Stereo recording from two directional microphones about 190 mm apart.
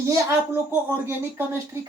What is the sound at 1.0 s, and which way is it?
Speech, 15° right (ahead or behind).